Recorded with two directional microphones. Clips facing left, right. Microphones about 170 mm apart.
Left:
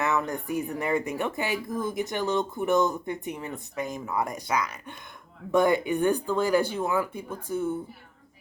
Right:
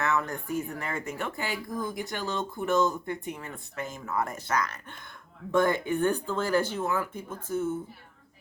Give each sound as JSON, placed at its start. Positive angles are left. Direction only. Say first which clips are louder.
{"t": 0.0, "sound": "speech", "louder": "left 2 dB", "side_deg": 15}